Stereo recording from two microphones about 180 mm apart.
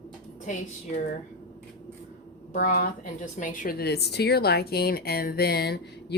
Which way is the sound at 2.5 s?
50° left (ahead or behind).